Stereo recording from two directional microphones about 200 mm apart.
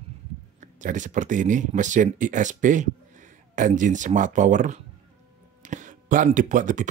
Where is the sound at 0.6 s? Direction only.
40° right (ahead or behind).